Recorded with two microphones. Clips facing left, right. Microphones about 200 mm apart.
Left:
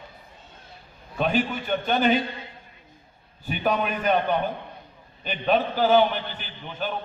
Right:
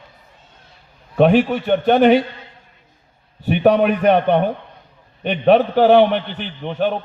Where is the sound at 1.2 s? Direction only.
70° right (ahead or behind).